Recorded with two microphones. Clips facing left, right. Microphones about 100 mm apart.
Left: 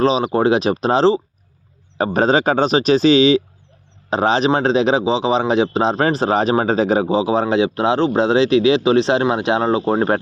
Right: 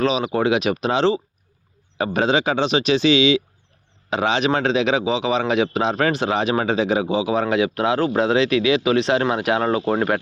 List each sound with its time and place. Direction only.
0.0 s a man's voice: 35° left (ahead or behind)